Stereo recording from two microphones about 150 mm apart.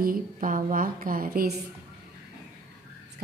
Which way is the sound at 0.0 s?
70° right (ahead or behind).